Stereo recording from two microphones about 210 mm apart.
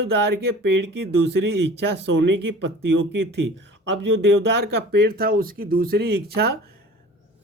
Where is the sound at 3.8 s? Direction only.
55° right (ahead or behind).